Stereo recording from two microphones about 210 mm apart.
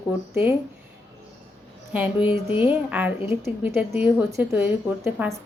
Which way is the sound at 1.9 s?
5° right (ahead or behind).